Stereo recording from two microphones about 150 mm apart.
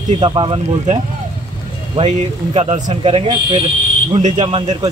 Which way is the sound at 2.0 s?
45° right (ahead or behind).